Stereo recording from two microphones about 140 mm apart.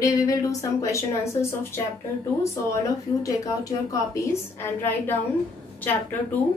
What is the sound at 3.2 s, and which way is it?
A woman's voice, 25° left (ahead or behind).